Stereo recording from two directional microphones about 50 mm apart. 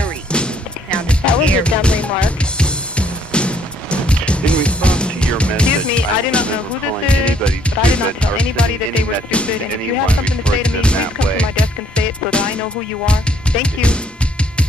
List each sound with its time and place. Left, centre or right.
0.0 s music: centre